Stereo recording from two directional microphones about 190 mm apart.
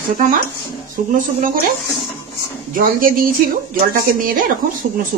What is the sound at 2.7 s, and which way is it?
A woman's voice, 45° right (ahead or behind).